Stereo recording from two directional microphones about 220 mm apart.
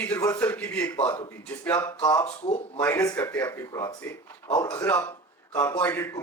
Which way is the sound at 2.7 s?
10° left (ahead or behind).